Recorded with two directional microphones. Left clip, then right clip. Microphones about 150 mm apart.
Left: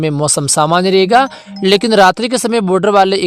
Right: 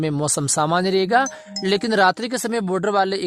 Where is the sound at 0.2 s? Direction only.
30° left (ahead or behind).